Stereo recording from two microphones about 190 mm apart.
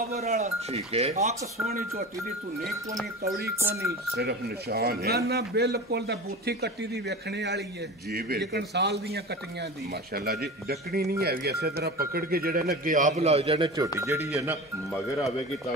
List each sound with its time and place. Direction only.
0.2 s speech: 35° right (ahead or behind)
3.5 s speech: 15° right (ahead or behind)
4.2 s a man's voice: 55° right (ahead or behind); by 13.8 s 25° right (ahead or behind)
13.9 s speech: 15° right (ahead or behind)